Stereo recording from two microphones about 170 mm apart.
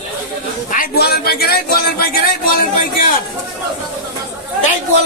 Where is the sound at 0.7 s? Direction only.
60° left (ahead or behind).